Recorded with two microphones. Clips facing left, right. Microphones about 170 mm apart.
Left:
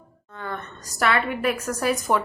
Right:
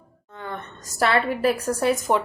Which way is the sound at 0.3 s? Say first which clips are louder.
Left 1 dB; 20° right (ahead or behind).